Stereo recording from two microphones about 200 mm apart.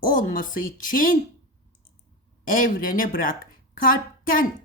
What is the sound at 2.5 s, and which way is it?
A woman's voice, 45° left (ahead or behind).